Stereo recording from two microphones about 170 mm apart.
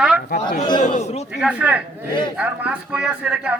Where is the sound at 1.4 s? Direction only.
10° right (ahead or behind).